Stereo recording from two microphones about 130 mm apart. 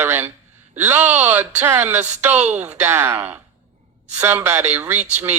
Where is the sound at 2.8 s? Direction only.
20° right (ahead or behind).